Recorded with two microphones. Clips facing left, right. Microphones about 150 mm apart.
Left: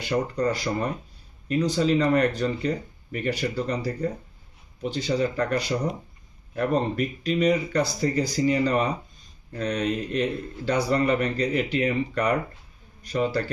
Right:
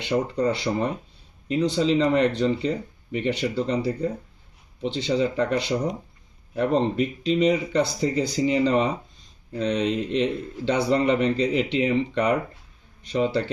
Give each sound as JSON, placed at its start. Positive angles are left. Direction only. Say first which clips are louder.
{"t": 0.3, "sound": "speech", "louder": "right 2 dB", "side_deg": -20}